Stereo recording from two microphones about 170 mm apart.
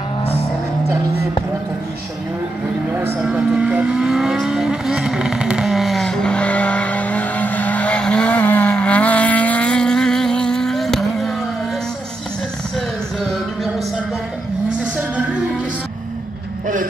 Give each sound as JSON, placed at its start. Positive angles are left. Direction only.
{"t": 0.2, "sound": "vehicle", "side_deg": 35}
{"t": 3.2, "sound": "vehicle", "side_deg": -5}